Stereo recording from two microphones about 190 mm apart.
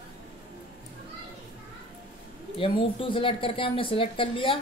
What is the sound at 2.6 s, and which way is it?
Speech, 30° left (ahead or behind).